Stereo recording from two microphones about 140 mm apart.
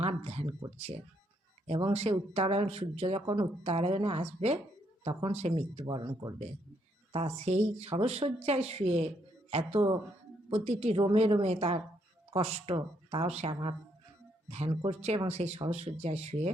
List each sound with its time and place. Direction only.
0.0 s a sound: 50° right (ahead or behind)
0.8 s speech: 50° right (ahead or behind)
5.8 s speech: 25° right (ahead or behind)
7.1 s speech: 45° right (ahead or behind)
14.8 s speech: 50° right (ahead or behind)